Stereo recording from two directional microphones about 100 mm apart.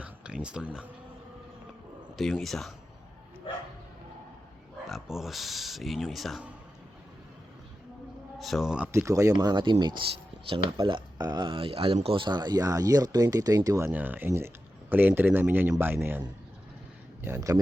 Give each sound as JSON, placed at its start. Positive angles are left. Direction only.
{"t": 0.0, "sound": "a sound", "side_deg": -10}
{"t": 2.1, "sound": "speech", "side_deg": 0}
{"t": 4.9, "sound": "speech", "side_deg": 0}
{"t": 8.4, "sound": "speech", "side_deg": 0}
{"t": 8.9, "sound": "speech", "side_deg": -30}
{"t": 9.4, "sound": "speech", "side_deg": -45}
{"t": 10.8, "sound": "speech", "side_deg": -45}
{"t": 13.9, "sound": "speech", "side_deg": -20}
{"t": 17.2, "sound": "speech", "side_deg": -30}